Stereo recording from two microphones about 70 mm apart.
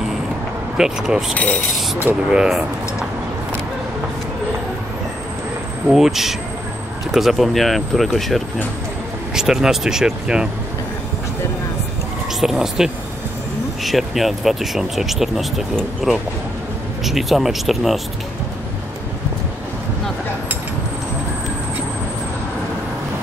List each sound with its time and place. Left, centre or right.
0.7 s speech: centre
1.3 s a sound: left
2.2 s speech: centre
5.9 s speech: centre
12.4 s speech: centre
17.0 s speech: centre